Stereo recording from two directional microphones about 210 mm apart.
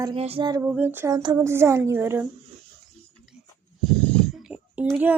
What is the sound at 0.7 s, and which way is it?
Speech, 10° right (ahead or behind).